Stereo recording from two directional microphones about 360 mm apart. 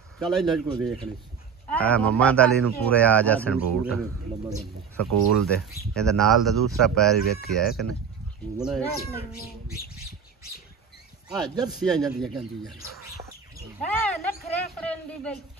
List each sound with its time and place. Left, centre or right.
0.2 s a man's voice: centre
5.0 s speech: right
5.9 s a man's voice: centre
7.2 s speech: left
8.5 s a man's voice: centre
9.1 s speech: left
11.2 s speech: centre
12.2 s a man's voice: centre
12.7 s speech: left
13.8 s a man's voice: centre